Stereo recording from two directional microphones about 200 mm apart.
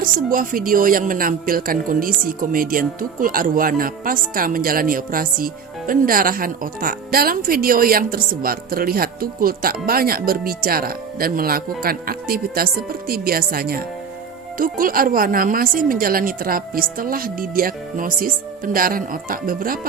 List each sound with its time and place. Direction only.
0.0 s a woman's voice: 45° right (ahead or behind)